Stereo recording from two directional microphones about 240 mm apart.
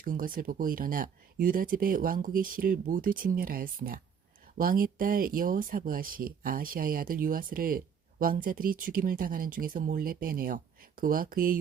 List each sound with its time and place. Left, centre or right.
0.0 s speech: right